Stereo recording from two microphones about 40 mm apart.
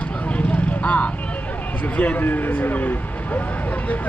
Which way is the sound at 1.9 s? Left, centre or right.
Left.